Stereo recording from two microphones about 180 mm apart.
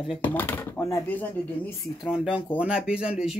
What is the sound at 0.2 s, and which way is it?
Speech, 10° left (ahead or behind).